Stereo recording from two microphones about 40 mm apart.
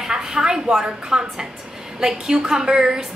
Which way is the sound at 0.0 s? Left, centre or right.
Centre.